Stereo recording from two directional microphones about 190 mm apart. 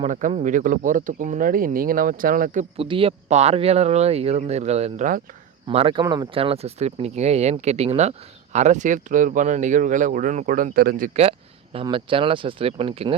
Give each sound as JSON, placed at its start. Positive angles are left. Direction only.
{"t": 0.0, "sound": "speech", "side_deg": -40}
{"t": 2.7, "sound": "speech", "side_deg": -30}
{"t": 5.6, "sound": "speech", "side_deg": -30}
{"t": 11.2, "sound": "speech", "side_deg": -30}